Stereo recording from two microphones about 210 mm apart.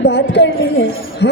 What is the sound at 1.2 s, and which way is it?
Speech, 55° left (ahead or behind).